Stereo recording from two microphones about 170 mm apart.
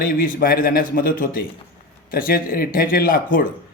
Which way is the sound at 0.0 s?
55° left (ahead or behind).